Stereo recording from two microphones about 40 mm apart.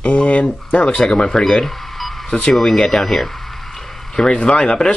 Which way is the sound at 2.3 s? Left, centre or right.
Left.